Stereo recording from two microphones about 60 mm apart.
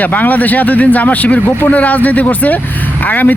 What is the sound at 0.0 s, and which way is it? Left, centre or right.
Speech, left.